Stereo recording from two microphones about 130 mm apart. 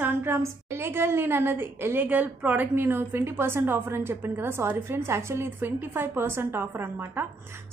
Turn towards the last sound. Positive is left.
turn(degrees=-20)  # may be behind; listen again after turning